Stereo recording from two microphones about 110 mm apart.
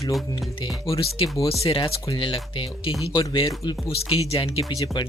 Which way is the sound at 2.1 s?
50° left (ahead or behind).